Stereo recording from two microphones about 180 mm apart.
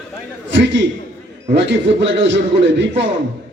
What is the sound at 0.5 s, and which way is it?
A man's voice, 90° right.